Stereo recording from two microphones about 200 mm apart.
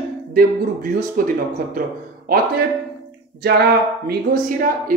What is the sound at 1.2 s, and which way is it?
Speech, 45° right (ahead or behind).